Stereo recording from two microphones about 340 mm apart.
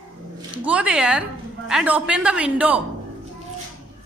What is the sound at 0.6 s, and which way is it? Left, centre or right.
Speech, centre.